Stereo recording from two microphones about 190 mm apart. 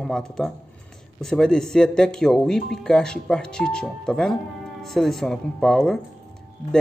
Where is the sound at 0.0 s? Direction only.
Centre (ahead or behind).